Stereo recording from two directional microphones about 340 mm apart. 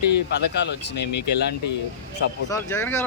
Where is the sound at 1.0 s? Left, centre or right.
Left.